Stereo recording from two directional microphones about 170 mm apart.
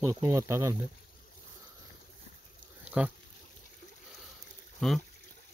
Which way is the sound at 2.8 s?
5° right (ahead or behind).